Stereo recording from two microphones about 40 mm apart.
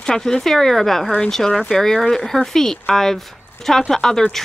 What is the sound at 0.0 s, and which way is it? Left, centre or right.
Speech, centre.